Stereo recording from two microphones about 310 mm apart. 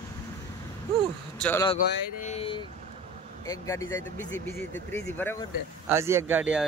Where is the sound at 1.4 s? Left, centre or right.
Centre.